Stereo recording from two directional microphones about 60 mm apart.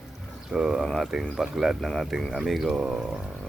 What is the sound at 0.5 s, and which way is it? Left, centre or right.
Speech, centre.